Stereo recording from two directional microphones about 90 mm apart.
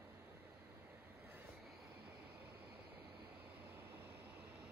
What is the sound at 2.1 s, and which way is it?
Vehicle, 20° right (ahead or behind).